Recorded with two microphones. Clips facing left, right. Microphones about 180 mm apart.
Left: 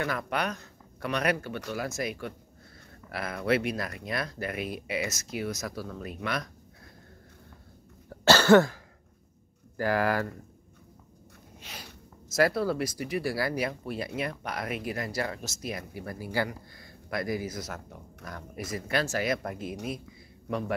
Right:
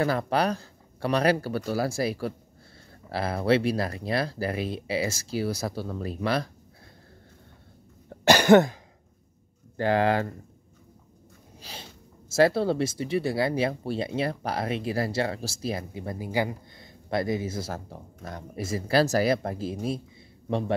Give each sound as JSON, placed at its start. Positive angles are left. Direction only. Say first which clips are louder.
{"t": 0.0, "sound": "speech", "louder": "right 6 dB", "side_deg": -35}
{"t": 8.1, "sound": "cough", "louder": "right 2 dB", "side_deg": -15}
{"t": 9.8, "sound": "speech", "louder": "right 4 dB", "side_deg": -25}
{"t": 11.5, "sound": "speech", "louder": "right 2 dB", "side_deg": -30}